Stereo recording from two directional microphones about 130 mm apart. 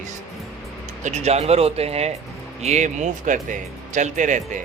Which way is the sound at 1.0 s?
60° right (ahead or behind).